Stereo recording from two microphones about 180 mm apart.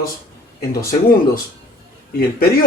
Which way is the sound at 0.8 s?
55° left (ahead or behind).